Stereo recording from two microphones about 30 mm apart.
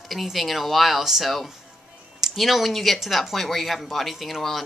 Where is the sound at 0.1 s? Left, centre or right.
Centre.